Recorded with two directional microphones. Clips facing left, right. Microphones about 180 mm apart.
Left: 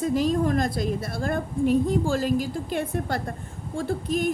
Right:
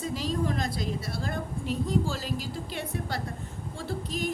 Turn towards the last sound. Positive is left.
turn(degrees=50)  # may be behind; listen again after turning